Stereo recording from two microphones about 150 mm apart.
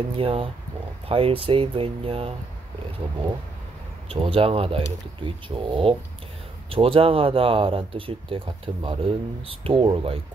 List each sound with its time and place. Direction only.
0.2 s speech: 40° right (ahead or behind)
4.1 s speech: 40° right (ahead or behind)